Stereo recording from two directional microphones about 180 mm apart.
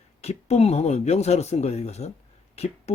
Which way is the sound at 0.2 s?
35° left (ahead or behind).